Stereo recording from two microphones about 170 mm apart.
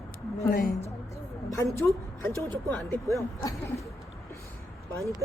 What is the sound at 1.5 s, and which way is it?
A woman's voice, 15° left (ahead or behind).